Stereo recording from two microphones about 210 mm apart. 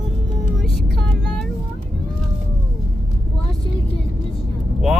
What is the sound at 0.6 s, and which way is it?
Vehicle, centre (ahead or behind).